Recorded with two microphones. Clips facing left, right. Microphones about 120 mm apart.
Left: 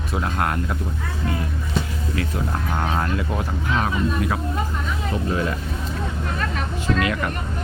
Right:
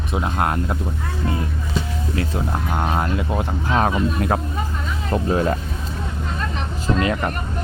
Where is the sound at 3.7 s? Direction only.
35° right (ahead or behind).